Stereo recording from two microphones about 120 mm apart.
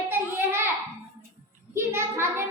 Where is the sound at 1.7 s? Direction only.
20° right (ahead or behind).